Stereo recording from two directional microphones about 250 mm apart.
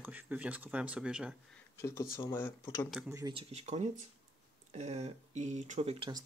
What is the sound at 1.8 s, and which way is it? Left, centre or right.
Speech, centre.